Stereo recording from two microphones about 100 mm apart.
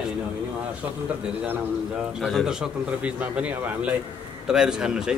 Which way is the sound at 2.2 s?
Centre (ahead or behind).